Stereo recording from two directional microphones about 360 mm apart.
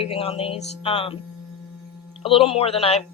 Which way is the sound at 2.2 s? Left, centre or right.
Centre.